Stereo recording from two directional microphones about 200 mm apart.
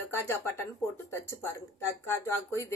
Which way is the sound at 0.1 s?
10° left (ahead or behind).